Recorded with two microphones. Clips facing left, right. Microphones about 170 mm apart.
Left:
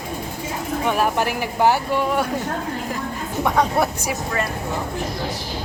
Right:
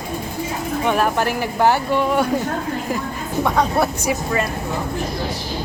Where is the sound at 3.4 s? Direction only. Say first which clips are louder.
Right 1 dB; 15° left (ahead or behind).